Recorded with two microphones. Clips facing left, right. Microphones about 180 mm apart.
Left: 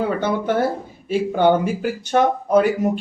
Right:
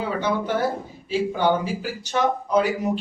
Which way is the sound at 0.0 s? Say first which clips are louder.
Left 4 dB; 50° left (ahead or behind).